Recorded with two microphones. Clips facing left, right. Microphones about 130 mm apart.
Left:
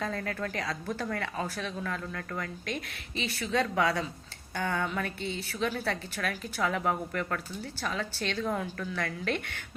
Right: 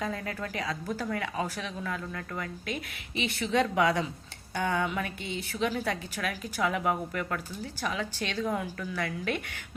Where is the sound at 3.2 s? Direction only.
20° right (ahead or behind).